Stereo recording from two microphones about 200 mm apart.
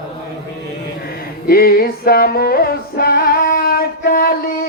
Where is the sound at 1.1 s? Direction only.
50° left (ahead or behind).